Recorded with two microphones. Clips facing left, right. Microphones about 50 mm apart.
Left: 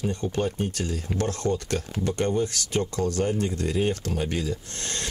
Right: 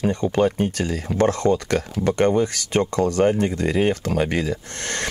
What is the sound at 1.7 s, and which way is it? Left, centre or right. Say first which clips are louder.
Speech: right 6 dB; right.